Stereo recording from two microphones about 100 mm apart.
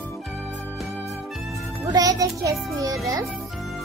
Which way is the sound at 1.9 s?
35° right (ahead or behind).